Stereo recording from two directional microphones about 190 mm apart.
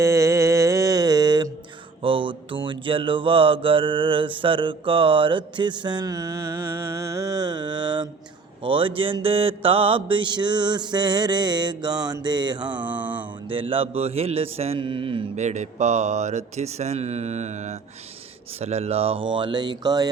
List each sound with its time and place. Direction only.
0.0 s mantra: 15° right (ahead or behind)
12.7 s mantra: 10° right (ahead or behind)
13.5 s speech: 30° right (ahead or behind)
19.4 s mantra: 25° right (ahead or behind)